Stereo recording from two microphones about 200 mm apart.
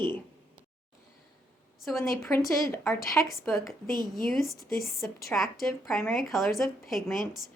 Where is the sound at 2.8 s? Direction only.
Centre (ahead or behind).